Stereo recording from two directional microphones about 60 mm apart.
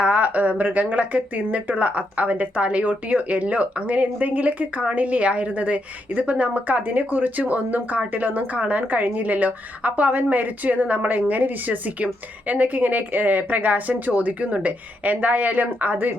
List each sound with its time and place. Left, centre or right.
0.0 s speech: right